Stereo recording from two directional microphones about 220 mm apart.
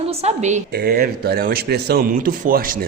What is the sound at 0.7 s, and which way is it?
A man's voice, 45° right (ahead or behind).